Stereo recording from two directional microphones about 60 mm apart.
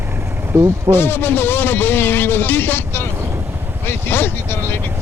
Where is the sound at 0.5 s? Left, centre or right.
Right.